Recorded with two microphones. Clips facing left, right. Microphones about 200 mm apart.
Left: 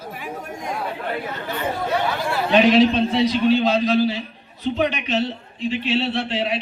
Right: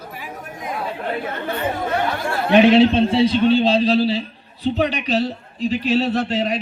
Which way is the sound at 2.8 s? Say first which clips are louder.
Right 2 dB; 30° right (ahead or behind).